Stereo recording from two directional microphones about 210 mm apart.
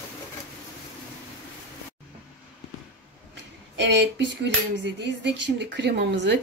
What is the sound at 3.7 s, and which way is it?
A woman's voice, 55° right (ahead or behind).